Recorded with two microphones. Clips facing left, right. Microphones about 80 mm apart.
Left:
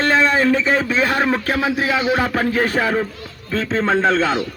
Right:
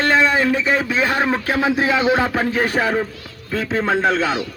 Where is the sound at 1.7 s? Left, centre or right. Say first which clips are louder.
Right 2 dB; right.